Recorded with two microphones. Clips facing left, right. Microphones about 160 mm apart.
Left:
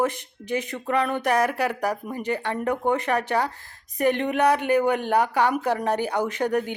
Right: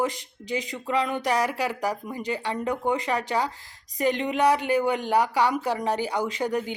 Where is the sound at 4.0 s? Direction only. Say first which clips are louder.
Left 2 dB; 60° left (ahead or behind).